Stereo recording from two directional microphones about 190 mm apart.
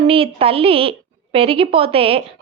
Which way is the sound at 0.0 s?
30° right (ahead or behind).